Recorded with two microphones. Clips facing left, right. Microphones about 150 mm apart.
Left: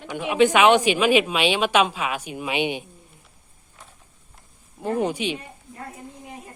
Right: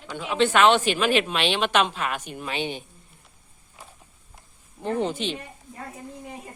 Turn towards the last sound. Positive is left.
turn(degrees=10)  # may be behind; listen again after turning